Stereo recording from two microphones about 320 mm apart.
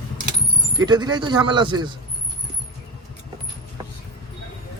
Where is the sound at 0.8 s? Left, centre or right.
Centre.